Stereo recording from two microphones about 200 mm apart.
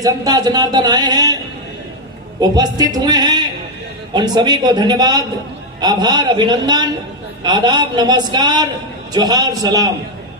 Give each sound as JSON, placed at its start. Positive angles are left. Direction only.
{"t": 0.0, "sound": "speech", "side_deg": -20}
{"t": 2.4, "sound": "speech", "side_deg": -20}